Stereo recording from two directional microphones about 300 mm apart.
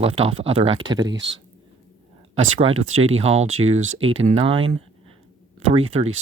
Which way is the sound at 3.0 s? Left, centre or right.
Centre.